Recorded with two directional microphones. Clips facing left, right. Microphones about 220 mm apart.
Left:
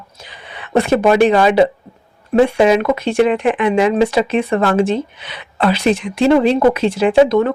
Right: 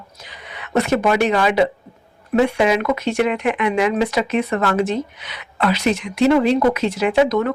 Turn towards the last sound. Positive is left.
turn(degrees=30)  # may be behind; listen again after turning